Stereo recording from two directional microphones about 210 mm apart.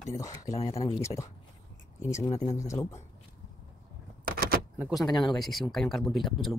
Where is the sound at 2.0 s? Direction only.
35° left (ahead or behind).